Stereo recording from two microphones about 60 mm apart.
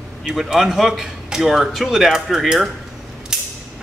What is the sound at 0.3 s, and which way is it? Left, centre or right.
A man's voice, centre.